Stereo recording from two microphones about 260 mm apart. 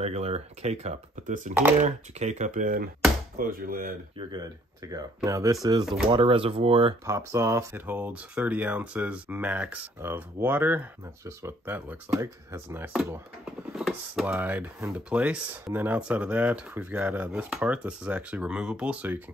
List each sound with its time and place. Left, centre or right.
0.0 s speech: right
1.5 s speech: centre
1.8 s speech: right
4.3 s speech: centre